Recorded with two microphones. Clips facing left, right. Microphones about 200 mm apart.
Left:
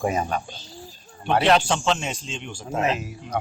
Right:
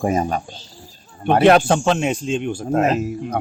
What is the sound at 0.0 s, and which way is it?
Speech, 45° right (ahead or behind).